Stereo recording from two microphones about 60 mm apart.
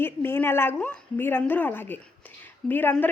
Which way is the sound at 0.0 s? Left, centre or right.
Left.